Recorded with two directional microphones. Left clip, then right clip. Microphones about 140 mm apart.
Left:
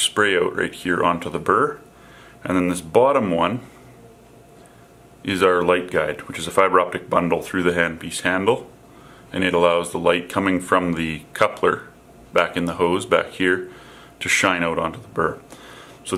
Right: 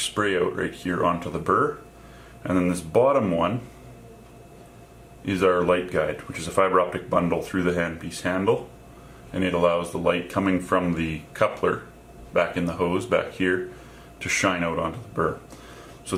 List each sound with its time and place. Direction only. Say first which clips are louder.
0.0 s speech: left 5 dB; 40° left (ahead or behind)
5.2 s speech: left 4 dB; 35° left (ahead or behind)